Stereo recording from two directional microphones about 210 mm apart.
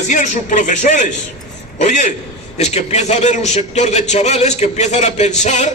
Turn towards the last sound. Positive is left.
turn(degrees=35)  # may be behind; listen again after turning